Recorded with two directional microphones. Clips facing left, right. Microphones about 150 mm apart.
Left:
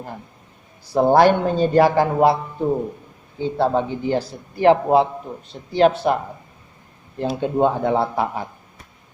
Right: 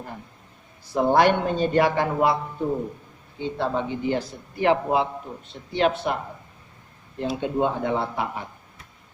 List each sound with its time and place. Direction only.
0.9 s a man's voice: 35° left (ahead or behind)
3.4 s a man's voice: 35° left (ahead or behind)
7.2 s a man's voice: 40° left (ahead or behind)